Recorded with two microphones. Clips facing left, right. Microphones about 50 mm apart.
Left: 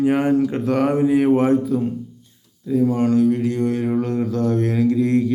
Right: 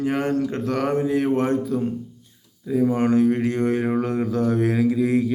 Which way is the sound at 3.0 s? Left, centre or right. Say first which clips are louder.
Left 2 dB; right.